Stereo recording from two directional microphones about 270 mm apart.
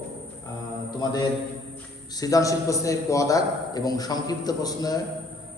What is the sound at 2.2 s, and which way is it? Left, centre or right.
A man's voice, centre.